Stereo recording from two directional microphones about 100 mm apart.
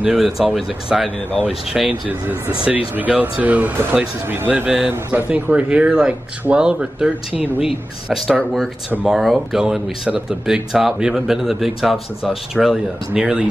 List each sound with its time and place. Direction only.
0.0 s speech: 5° right (ahead or behind)
1.9 s speech: 20° right (ahead or behind)